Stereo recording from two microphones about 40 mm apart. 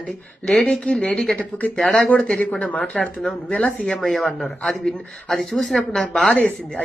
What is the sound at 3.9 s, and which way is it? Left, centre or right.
Speech, left.